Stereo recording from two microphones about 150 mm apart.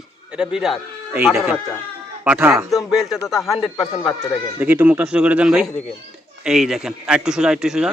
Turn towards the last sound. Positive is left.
turn(degrees=-5)  # may be behind; listen again after turning